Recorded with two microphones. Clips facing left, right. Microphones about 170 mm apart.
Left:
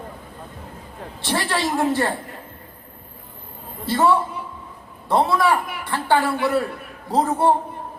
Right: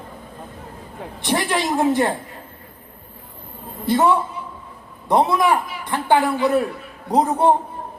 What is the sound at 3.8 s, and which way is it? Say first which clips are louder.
Speech: right 1 dB; 20° right (ahead or behind).